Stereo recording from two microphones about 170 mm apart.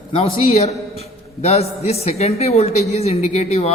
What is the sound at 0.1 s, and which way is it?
A man's voice, 35° left (ahead or behind).